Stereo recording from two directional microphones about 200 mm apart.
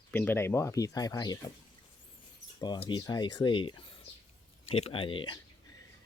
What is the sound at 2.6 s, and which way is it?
Speech, 25° left (ahead or behind).